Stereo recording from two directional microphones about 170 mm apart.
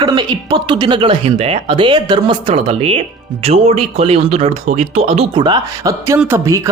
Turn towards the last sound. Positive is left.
turn(degrees=-15)  # may be behind; listen again after turning